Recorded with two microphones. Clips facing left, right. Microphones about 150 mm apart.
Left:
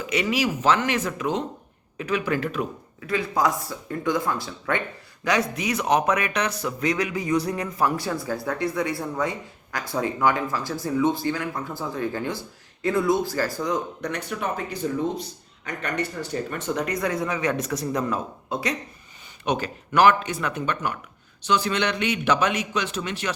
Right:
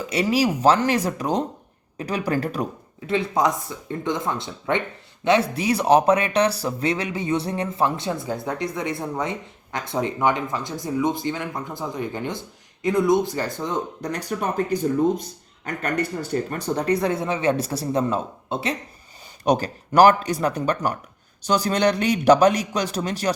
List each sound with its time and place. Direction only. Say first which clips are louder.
0.1 s speech: right 3 dB; 35° right (ahead or behind)
3.1 s speech: right 2 dB; 25° right (ahead or behind)